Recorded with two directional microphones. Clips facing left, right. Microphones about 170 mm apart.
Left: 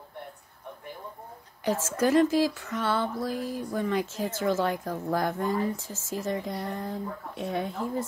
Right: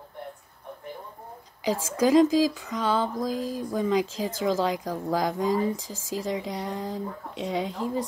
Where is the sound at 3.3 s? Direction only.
90° right.